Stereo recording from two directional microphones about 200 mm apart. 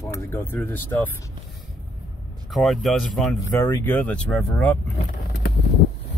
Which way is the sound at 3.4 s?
15° left (ahead or behind).